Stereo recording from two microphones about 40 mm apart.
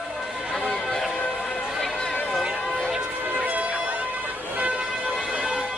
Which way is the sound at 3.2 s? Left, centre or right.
Right.